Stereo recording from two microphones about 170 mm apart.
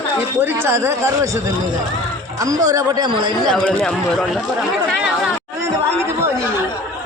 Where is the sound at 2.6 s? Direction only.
20° right (ahead or behind).